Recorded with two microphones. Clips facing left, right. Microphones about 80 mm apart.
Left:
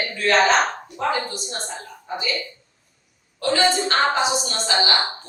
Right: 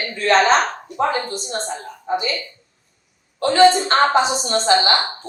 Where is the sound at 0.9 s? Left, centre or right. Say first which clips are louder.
Right 4 dB; right.